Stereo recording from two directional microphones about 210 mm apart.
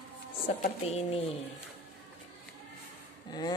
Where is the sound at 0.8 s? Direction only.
30° left (ahead or behind).